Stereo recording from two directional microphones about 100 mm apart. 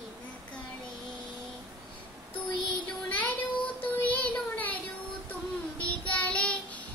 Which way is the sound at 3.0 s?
15° left (ahead or behind).